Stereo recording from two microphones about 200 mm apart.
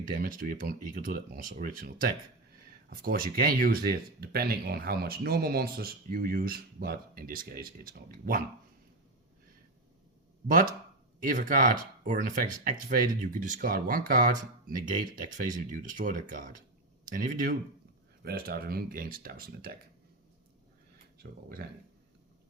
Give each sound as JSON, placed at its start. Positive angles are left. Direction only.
{"t": 0.0, "sound": "speech", "side_deg": -45}
{"t": 2.9, "sound": "speech", "side_deg": -45}
{"t": 11.2, "sound": "speech", "side_deg": -40}
{"t": 21.2, "sound": "speech", "side_deg": -45}